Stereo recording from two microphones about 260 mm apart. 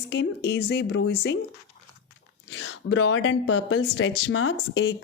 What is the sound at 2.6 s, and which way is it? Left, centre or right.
Speech, left.